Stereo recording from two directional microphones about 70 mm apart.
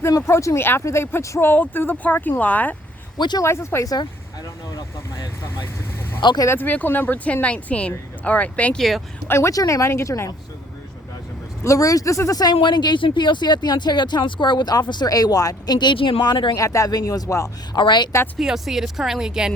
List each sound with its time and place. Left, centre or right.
0.2 s speech: left
1.4 s speech: left
3.2 s speech: left
3.4 s speech: left
6.2 s speech: left
6.6 s speech: left
9.2 s speech: left
9.5 s speech: left
11.6 s speech: left
12.4 s speech: left
16.6 s speech: left
16.9 s speech: left
17.7 s speech: left
18.3 s speech: centre